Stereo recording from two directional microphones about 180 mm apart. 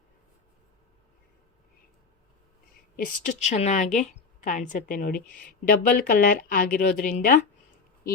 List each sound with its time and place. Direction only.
2.9 s a woman's voice: 50° left (ahead or behind)